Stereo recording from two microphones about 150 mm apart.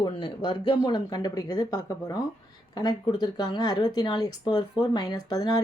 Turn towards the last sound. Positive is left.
turn(degrees=25)  # may be behind; listen again after turning